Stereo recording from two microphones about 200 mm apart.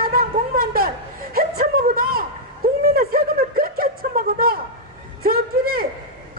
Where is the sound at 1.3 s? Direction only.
45° right (ahead or behind).